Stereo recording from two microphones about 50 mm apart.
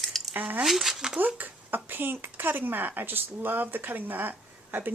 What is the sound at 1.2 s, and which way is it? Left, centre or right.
Speech, right.